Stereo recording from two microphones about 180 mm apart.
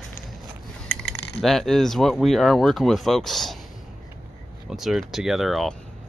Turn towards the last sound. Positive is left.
turn(degrees=0)  # may be behind; listen again after turning